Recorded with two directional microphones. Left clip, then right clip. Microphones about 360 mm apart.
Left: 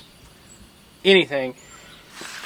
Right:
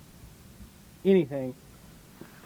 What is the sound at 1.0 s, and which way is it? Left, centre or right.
Speech, centre.